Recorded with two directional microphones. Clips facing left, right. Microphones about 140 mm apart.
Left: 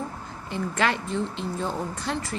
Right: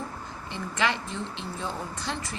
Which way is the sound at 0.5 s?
45° left (ahead or behind).